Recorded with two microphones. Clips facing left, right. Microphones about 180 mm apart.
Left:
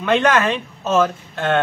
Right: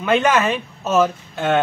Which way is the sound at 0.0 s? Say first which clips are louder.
Even; 5° right (ahead or behind).